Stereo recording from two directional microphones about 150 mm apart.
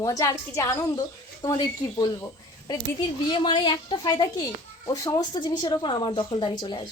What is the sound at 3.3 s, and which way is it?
A woman's voice, 30° left (ahead or behind).